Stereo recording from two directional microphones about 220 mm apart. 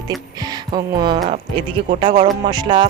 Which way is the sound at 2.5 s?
20° right (ahead or behind).